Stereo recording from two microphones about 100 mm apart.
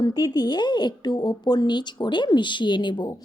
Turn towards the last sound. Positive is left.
turn(degrees=50)  # may be behind; listen again after turning